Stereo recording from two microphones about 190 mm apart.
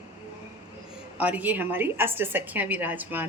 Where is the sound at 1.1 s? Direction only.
5° right (ahead or behind).